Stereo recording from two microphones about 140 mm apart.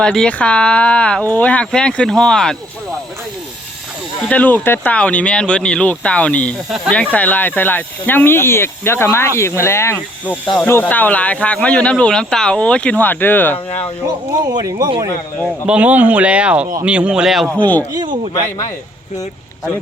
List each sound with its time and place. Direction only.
0.0 s speech: 5° left (ahead or behind)
4.2 s speech: 10° left (ahead or behind)
6.7 s speech: 5° right (ahead or behind)
6.9 s speech: 10° left (ahead or behind)
14.6 s speech: 25° right (ahead or behind)
15.6 s speech: 10° right (ahead or behind)
17.9 s speech: 30° right (ahead or behind)